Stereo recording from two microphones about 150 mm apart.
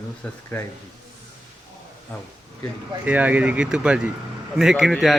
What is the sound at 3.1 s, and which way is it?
Speech, 10° right (ahead or behind).